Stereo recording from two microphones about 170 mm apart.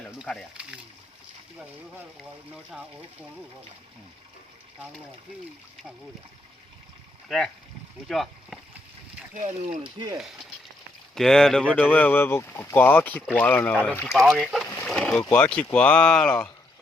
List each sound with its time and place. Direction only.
0.2 s speech: centre (ahead or behind)
7.3 s speech: 5° left (ahead or behind)
9.3 s speech: 45° right (ahead or behind)
9.8 s speech: 25° right (ahead or behind)
11.1 s speech: 5° left (ahead or behind)
14.1 s speech: centre (ahead or behind)
14.8 s boat: 5° left (ahead or behind)
15.3 s speech: 5° left (ahead or behind)